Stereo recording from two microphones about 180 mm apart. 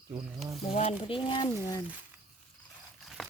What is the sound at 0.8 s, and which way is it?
Speech, 35° left (ahead or behind).